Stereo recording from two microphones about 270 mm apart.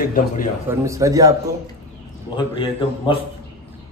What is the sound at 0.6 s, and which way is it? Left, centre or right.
Speech, centre.